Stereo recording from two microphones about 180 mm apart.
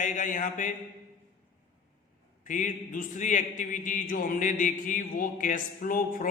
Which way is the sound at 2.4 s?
45° left (ahead or behind).